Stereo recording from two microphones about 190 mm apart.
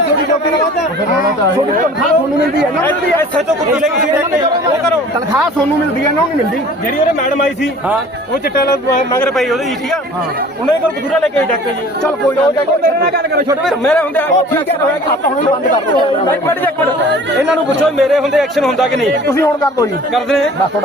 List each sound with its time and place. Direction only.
3.8 s speech: 5° right (ahead or behind)
8.5 s speech: 55° left (ahead or behind)
9.4 s speech: centre (ahead or behind)
13.0 s a man's voice: 55° right (ahead or behind)
13.7 s speech: 5° left (ahead or behind)
16.3 s speech: 10° left (ahead or behind)
17.9 s speech: centre (ahead or behind)
19.3 s speech: 15° left (ahead or behind)